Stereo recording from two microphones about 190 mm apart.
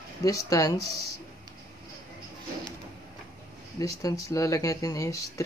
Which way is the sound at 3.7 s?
20° left (ahead or behind).